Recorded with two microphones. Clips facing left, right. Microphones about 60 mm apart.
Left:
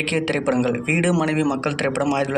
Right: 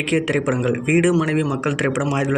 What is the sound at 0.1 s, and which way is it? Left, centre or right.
Speech, centre.